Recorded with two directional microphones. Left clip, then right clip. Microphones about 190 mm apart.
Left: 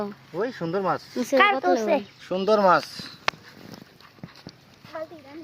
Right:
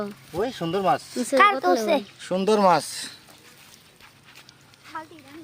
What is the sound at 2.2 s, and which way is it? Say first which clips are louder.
Speech: even; 70° right (ahead or behind).